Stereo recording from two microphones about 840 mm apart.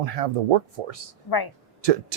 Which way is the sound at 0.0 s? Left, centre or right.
Right.